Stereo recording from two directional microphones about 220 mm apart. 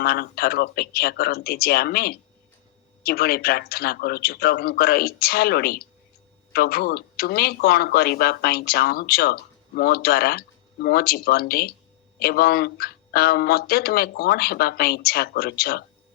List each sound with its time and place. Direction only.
0.0 s speech: 45° left (ahead or behind)